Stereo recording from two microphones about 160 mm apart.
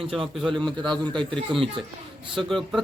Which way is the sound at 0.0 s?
35° right (ahead or behind).